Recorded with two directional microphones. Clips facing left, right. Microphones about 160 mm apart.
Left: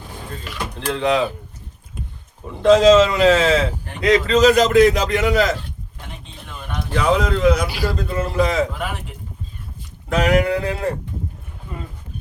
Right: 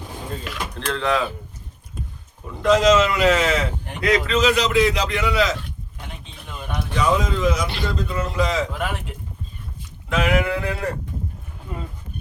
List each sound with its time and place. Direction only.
0.9 s speech: 15° left (ahead or behind)
2.6 s speech: 30° left (ahead or behind)
4.4 s a man's voice: 45° left (ahead or behind)
6.9 s speech: 65° left (ahead or behind)
7.7 s a man's voice: 5° left (ahead or behind)
7.9 s a man's voice: 50° left (ahead or behind)
10.1 s a sound: 40° left (ahead or behind)